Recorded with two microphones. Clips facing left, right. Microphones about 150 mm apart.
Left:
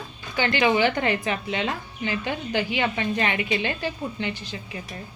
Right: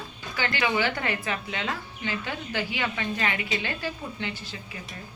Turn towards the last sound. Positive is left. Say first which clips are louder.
# left 5 dB
turn(degrees=20)  # may be behind; listen again after turning